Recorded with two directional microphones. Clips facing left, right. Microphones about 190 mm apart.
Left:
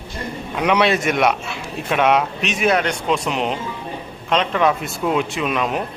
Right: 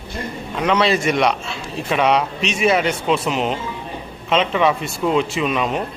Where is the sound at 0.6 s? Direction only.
10° left (ahead or behind).